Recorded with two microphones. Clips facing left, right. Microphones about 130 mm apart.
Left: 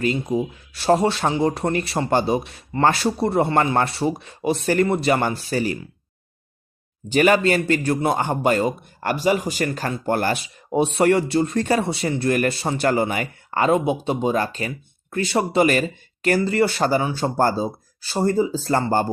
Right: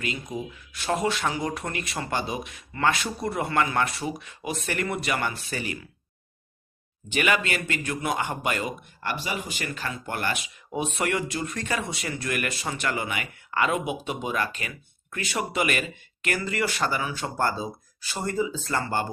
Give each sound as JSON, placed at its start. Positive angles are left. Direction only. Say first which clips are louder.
{"t": 0.0, "sound": "speech", "louder": "left 10 dB", "side_deg": 35}
{"t": 7.1, "sound": "speech", "louder": "left 9 dB", "side_deg": 35}
{"t": 9.0, "sound": "speech", "louder": "left 11 dB", "side_deg": 45}